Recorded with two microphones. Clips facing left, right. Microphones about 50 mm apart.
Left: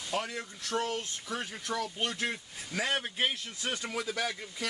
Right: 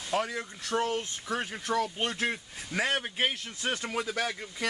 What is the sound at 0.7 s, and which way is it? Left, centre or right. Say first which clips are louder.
Speech: right 3 dB; centre.